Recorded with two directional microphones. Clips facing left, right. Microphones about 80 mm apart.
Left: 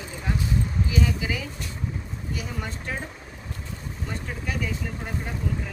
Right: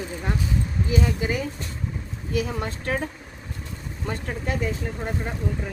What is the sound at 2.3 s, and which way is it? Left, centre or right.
Speech, right.